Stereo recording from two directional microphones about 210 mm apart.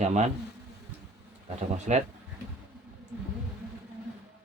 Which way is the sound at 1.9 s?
35° right (ahead or behind).